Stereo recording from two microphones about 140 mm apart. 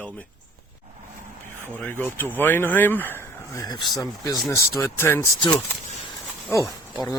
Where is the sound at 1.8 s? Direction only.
15° left (ahead or behind).